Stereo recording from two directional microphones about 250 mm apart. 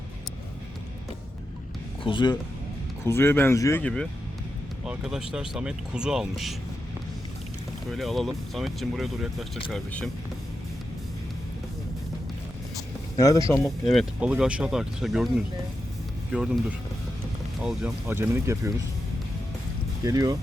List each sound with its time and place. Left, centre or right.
2.0 s speech: centre
7.9 s speech: centre
13.1 s speech: centre
13.9 s speech: centre
16.3 s speech: centre
20.1 s speech: centre